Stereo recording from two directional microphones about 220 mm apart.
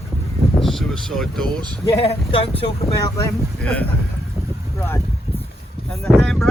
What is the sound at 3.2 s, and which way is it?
Speech, 5° left (ahead or behind).